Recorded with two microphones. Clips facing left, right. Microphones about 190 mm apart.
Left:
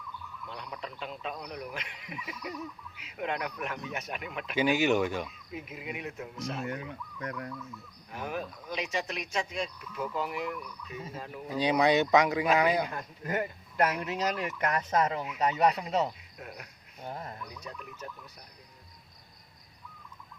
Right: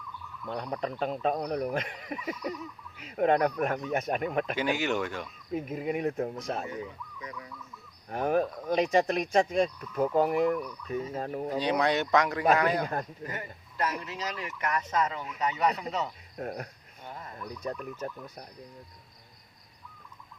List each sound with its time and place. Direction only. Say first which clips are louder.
0.4 s speech: right 9 dB; 45° right (ahead or behind)
4.5 s speech: left 3 dB; 10° left (ahead or behind)
5.5 s speech: right 9 dB; 40° right (ahead or behind)
7.2 s speech: left 6 dB; 60° left (ahead or behind)
8.1 s speech: right 9 dB; 45° right (ahead or behind)
11.6 s speech: left 4 dB; 10° left (ahead or behind)
13.2 s speech: left 6 dB; 55° left (ahead or behind)
14.8 s speech: left 2 dB; 30° left (ahead or behind)
16.4 s speech: right 10 dB; 45° right (ahead or behind)
17.0 s speech: left 4 dB; 35° left (ahead or behind)
17.6 s speech: right 12 dB; 45° right (ahead or behind)